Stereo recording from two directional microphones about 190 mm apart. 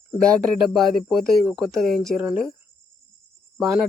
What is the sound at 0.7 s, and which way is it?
Speech, centre (ahead or behind).